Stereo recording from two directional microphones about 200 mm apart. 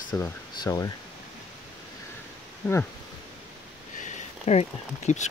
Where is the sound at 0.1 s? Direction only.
15° left (ahead or behind).